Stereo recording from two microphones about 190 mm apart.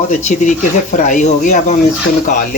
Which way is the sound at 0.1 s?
40° left (ahead or behind).